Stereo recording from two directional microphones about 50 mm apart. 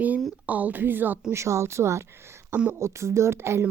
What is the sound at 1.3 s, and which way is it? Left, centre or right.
Speech, right.